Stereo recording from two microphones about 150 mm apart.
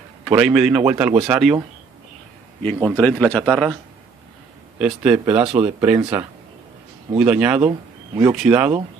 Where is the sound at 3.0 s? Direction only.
10° left (ahead or behind).